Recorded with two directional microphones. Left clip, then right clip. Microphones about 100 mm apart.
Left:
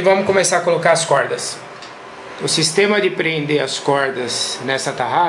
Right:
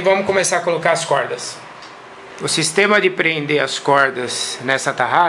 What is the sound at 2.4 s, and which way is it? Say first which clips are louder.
Speech: even; 25° right (ahead or behind).